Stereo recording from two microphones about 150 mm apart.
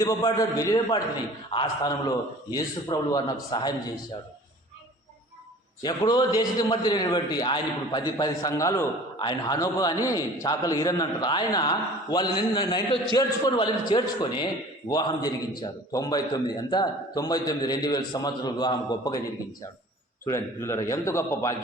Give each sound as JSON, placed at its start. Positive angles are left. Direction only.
{"t": 0.0, "sound": "a man's voice", "side_deg": 25}
{"t": 5.8, "sound": "a man's voice", "side_deg": 30}
{"t": 20.2, "sound": "a man's voice", "side_deg": 20}